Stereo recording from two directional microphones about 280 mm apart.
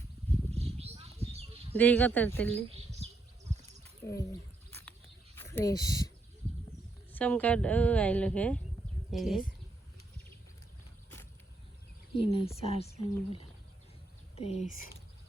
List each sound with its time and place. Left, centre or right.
0.5 s a sound: right
1.7 s a woman's voice: centre
4.0 s bird: centre
5.4 s speech: centre
7.1 s a woman's voice: centre
12.1 s a woman's voice: centre